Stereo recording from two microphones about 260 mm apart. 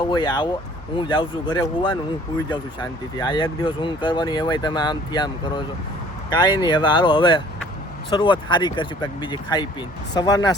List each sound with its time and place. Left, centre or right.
0.1 s speech: centre
3.2 s speech: centre